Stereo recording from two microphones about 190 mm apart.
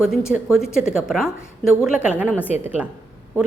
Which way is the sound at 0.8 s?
Centre (ahead or behind).